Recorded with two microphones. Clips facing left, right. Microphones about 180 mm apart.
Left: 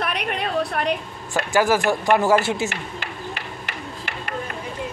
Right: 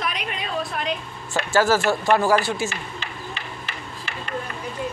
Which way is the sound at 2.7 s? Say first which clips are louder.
Left 2 dB; 55° left (ahead or behind).